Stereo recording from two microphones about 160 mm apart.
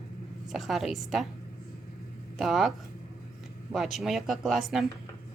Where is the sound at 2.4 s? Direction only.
Centre (ahead or behind).